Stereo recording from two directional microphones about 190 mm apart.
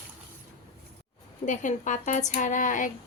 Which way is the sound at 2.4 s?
40° left (ahead or behind).